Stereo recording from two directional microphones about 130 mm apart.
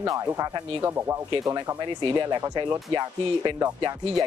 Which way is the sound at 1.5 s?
35° right (ahead or behind).